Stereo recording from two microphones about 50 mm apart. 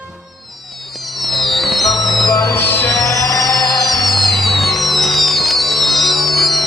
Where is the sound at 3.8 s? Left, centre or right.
Centre.